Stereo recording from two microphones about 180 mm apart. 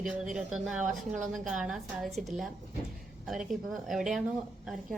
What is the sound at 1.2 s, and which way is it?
Speech, 45° right (ahead or behind).